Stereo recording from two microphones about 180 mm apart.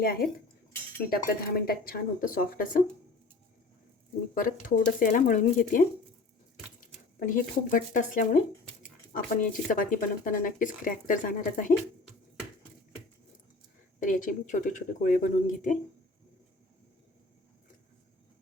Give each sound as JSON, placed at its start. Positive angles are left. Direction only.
{"t": 0.0, "sound": "speech", "side_deg": 55}
{"t": 4.4, "sound": "speech", "side_deg": 50}
{"t": 14.0, "sound": "speech", "side_deg": 45}